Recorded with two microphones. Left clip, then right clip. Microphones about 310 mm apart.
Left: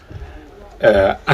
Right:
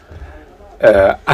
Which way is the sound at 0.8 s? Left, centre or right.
Centre.